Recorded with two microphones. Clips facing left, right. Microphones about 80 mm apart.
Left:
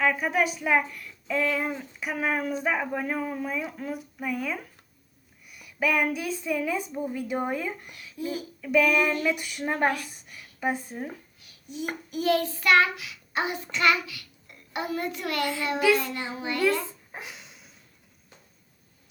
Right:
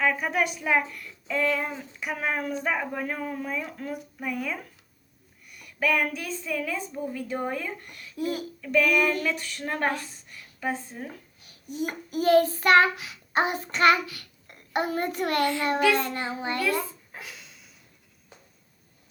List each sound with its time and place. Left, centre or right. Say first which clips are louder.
0.0 s a woman's voice: left 1 dB; centre
11.7 s child singing: right 2 dB; right
16.8 s dog: left 1 dB; left